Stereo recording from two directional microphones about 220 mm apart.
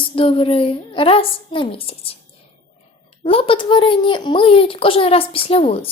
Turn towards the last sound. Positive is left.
turn(degrees=25)  # may be behind; listen again after turning